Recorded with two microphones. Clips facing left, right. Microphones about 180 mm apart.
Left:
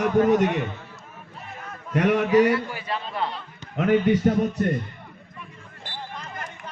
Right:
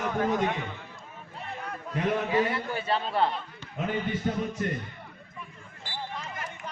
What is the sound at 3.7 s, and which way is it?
Speech, 75° left (ahead or behind).